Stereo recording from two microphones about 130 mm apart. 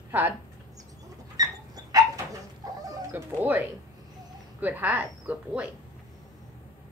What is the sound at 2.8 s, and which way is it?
Bird, 30° right (ahead or behind).